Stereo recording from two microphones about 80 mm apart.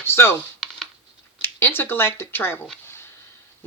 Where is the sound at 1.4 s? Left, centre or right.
Left.